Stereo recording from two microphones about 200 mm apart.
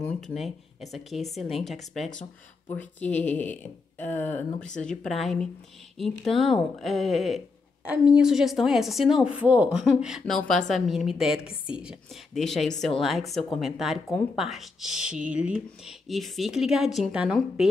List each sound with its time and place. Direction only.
0.3 s speech: centre (ahead or behind)
2.7 s a sound: 10° left (ahead or behind)
4.6 s speech: 5° left (ahead or behind)